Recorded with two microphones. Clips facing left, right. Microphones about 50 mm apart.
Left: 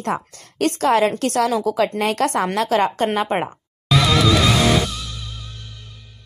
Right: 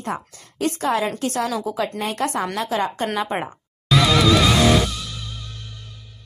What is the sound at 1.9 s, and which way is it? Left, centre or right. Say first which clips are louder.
Speech: left 4 dB; left.